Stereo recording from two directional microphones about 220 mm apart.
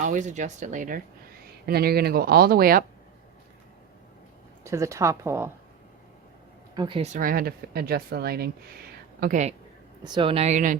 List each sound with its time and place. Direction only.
0.0 s speech: 35° right (ahead or behind)
4.6 s speech: 15° right (ahead or behind)
6.7 s speech: 25° right (ahead or behind); by 8.4 s 45° right (ahead or behind)
9.2 s speech: 35° right (ahead or behind)